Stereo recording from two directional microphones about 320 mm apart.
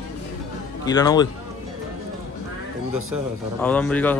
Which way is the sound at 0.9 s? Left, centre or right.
Centre.